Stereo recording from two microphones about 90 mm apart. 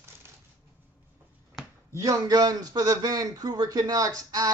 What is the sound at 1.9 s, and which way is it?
A man's voice, 35° right (ahead or behind).